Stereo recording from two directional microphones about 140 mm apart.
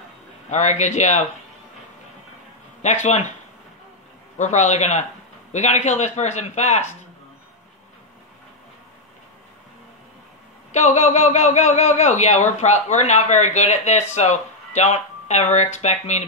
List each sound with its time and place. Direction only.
0.5 s speech: 55° left (ahead or behind)
2.8 s a man's voice: 55° left (ahead or behind)
4.4 s a man's voice: 55° left (ahead or behind)
10.7 s speech: 55° left (ahead or behind)